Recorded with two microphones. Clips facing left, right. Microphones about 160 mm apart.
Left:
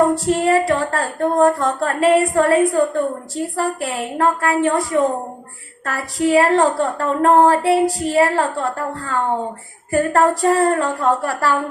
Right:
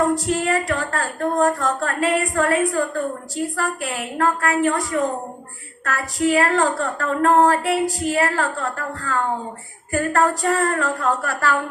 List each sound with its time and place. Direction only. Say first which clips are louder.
0.3 s a woman's voice: left 5 dB; 30° left (ahead or behind)